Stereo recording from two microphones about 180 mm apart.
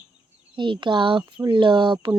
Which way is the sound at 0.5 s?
25° right (ahead or behind).